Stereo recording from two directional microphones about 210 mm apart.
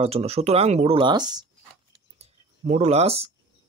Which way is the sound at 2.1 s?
30° right (ahead or behind).